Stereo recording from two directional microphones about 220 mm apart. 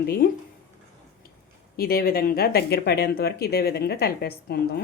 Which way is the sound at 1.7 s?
45° left (ahead or behind).